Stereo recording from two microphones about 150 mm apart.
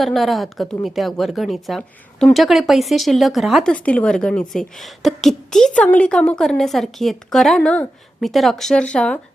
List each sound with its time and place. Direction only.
0.0 s speech: centre (ahead or behind)